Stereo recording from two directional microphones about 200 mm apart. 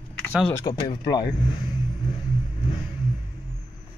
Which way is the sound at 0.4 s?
10° left (ahead or behind).